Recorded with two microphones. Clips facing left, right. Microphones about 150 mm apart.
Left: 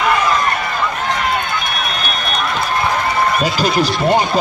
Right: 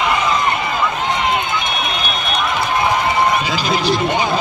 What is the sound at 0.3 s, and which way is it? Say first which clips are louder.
Run: even; 20° right (ahead or behind).